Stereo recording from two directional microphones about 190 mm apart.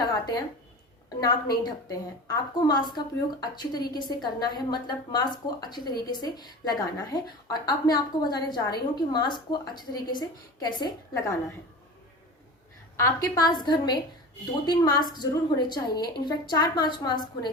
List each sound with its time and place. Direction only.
0.0 s a sound: 20° left (ahead or behind)
1.2 s a woman's voice: 20° left (ahead or behind)
13.0 s a woman's voice: 15° left (ahead or behind)